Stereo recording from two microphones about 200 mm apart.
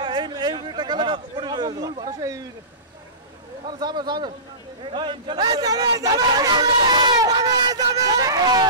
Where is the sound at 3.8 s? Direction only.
20° right (ahead or behind).